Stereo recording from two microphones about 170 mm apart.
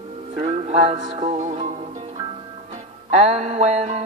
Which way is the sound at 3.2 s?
40° right (ahead or behind).